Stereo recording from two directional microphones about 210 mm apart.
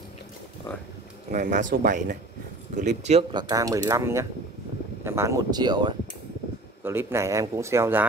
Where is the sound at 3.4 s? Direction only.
15° right (ahead or behind).